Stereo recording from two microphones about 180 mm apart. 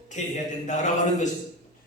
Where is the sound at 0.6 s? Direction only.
40° left (ahead or behind).